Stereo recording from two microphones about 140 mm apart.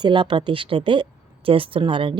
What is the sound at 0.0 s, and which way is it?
Speech, 35° right (ahead or behind).